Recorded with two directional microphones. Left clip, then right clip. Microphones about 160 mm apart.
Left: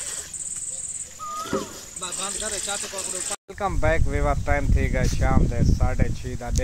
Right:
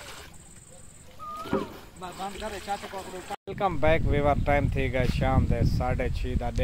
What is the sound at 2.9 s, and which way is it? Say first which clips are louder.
Speech: left 4 dB; centre (ahead or behind).